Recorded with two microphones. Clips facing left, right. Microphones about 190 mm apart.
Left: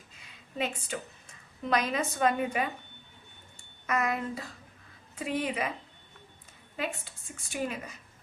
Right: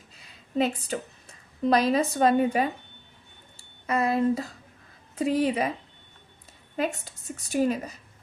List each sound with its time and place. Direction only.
0.2 s a woman's voice: 35° right (ahead or behind)
6.7 s a woman's voice: 40° right (ahead or behind)